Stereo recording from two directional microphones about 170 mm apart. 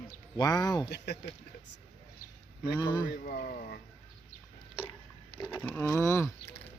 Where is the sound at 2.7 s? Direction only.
25° left (ahead or behind).